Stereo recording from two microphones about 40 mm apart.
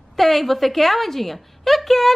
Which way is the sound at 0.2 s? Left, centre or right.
Centre.